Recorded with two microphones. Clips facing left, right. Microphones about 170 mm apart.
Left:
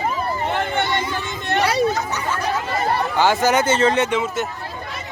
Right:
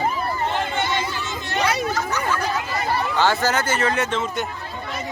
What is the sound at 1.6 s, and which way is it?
Speech, 30° left (ahead or behind).